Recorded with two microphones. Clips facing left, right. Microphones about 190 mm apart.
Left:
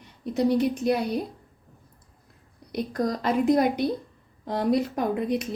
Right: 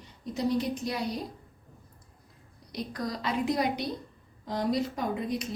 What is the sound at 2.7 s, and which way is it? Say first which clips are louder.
A woman's voice: left 7 dB; 50° left (ahead or behind).